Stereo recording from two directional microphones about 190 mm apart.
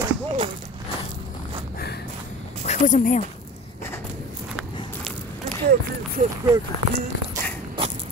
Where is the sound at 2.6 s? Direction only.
40° left (ahead or behind).